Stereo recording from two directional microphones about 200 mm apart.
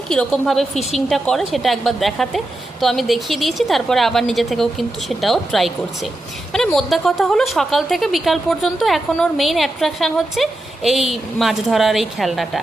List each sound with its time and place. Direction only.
0.1 s a woman's voice: 5° left (ahead or behind)